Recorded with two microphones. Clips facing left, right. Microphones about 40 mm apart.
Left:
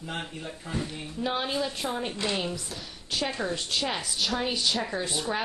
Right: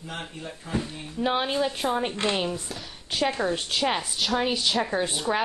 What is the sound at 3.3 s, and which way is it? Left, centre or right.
Speech, right.